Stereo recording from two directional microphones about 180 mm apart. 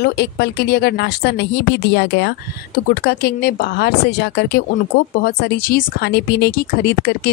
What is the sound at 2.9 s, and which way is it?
Speech, 60° left (ahead or behind).